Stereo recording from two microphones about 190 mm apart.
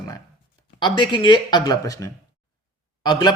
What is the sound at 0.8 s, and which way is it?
Speech, 25° left (ahead or behind).